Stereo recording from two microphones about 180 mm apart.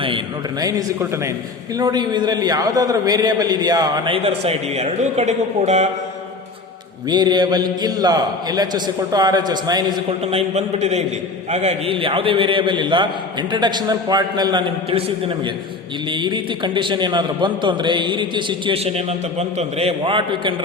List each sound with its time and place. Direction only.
0.6 s a man's voice: 20° right (ahead or behind); by 5.9 s 40° right (ahead or behind)
7.1 s a man's voice: 25° right (ahead or behind)
16.1 s a man's voice: 25° right (ahead or behind)